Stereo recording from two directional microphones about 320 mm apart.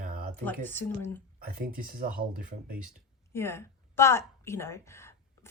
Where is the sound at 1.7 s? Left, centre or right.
Right.